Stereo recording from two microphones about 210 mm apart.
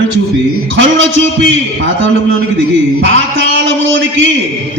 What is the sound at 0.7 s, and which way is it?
Speech, 65° right (ahead or behind).